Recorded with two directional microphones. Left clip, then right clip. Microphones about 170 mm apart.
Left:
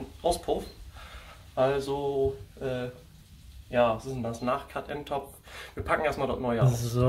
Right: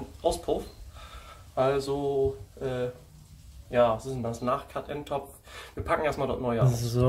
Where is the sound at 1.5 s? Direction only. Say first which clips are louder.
Even; 15° right (ahead or behind).